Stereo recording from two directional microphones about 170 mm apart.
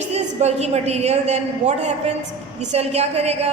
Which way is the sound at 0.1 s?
40° right (ahead or behind).